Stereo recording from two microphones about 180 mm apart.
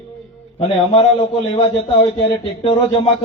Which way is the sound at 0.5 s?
35° left (ahead or behind).